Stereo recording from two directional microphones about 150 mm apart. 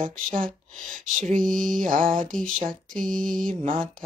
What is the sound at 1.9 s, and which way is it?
Music, 60° right (ahead or behind).